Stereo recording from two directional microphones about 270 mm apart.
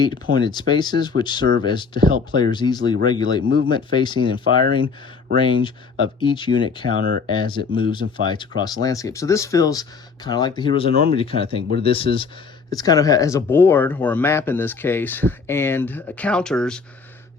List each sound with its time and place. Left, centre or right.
0.3 s speech: centre
5.4 s speech: centre
7.0 s speech: right
7.3 s speech: centre